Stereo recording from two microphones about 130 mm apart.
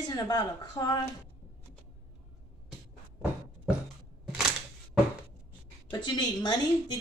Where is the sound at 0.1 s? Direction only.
30° left (ahead or behind).